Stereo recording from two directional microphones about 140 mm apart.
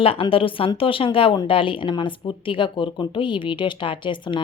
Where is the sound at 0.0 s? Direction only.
40° left (ahead or behind).